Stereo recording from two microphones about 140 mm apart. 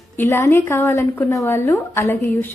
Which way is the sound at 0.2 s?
20° left (ahead or behind).